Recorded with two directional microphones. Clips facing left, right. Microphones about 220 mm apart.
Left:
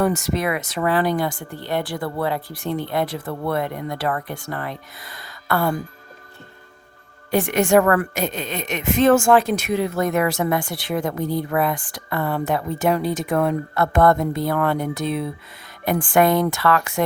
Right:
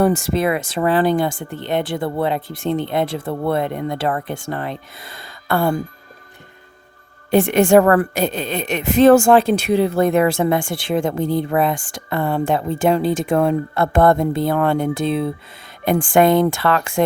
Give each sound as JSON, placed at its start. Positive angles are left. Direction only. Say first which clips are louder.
{"t": 0.0, "sound": "a woman's voice", "louder": "right 4 dB", "side_deg": -30}
{"t": 7.3, "sound": "a woman's voice", "louder": "right 5 dB", "side_deg": -25}